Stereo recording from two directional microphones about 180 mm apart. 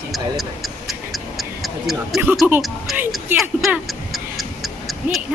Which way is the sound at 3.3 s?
Centre (ahead or behind).